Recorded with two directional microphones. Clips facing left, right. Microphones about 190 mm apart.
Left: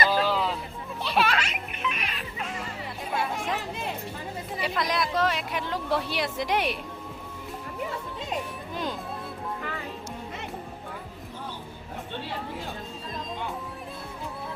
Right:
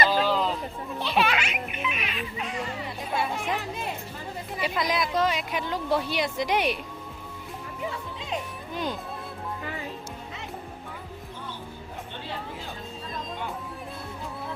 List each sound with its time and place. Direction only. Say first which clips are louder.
0.1 s a sound: right 1 dB; 5° left (ahead or behind)
1.0 s music: even; centre (ahead or behind)
4.6 s speech: right 1 dB; centre (ahead or behind)
8.7 s music: right 2 dB; centre (ahead or behind)